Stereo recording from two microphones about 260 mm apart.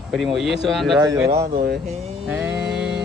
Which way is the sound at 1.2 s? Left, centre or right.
Right.